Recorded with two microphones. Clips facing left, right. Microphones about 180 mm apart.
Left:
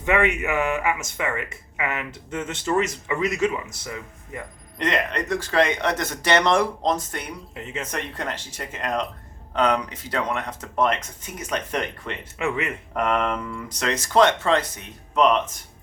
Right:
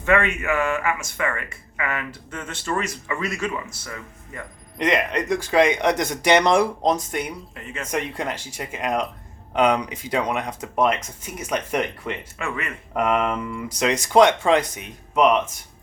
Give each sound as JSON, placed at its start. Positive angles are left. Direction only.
{"t": 0.0, "sound": "speech", "side_deg": 15}
{"t": 4.8, "sound": "speech", "side_deg": -10}
{"t": 7.5, "sound": "speech", "side_deg": 25}
{"t": 7.9, "sound": "speech", "side_deg": -10}
{"t": 12.4, "sound": "speech", "side_deg": 20}
{"t": 12.9, "sound": "speech", "side_deg": -10}